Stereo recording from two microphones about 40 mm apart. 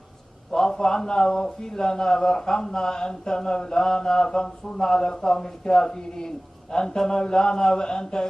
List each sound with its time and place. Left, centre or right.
0.5 s a man's voice: centre